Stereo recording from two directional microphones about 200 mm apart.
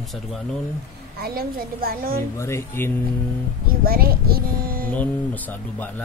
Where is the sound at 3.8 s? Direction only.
50° right (ahead or behind).